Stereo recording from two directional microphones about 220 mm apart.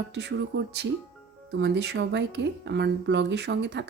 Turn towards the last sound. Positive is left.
turn(degrees=-50)  # may be behind; listen again after turning